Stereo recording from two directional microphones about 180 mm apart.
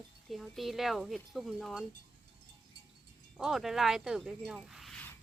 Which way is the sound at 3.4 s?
Centre (ahead or behind).